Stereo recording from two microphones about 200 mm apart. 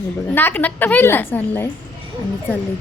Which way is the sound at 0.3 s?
10° left (ahead or behind).